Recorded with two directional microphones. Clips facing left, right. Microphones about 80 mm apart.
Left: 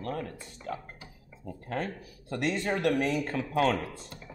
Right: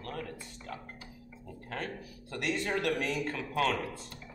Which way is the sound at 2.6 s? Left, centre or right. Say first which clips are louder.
Left 5 dB; left.